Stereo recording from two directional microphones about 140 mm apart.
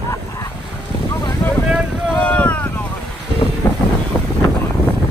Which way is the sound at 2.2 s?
10° left (ahead or behind).